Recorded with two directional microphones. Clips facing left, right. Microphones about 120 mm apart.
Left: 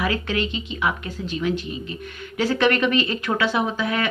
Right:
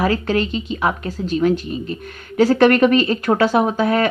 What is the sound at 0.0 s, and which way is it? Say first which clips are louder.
Speech: right 6 dB; 40° right (ahead or behind).